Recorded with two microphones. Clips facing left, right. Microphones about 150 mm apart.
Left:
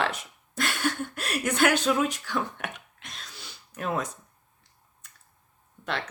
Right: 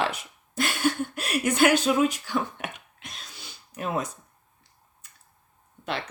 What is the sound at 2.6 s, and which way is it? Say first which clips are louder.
Cough: even; 5° right (ahead or behind).